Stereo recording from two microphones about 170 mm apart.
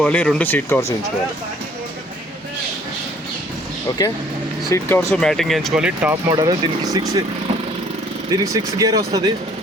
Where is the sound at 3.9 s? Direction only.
25° left (ahead or behind).